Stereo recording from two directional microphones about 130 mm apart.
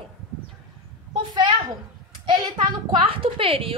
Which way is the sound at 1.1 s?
35° right (ahead or behind).